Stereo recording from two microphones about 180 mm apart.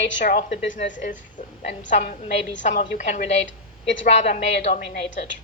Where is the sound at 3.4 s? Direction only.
90° left.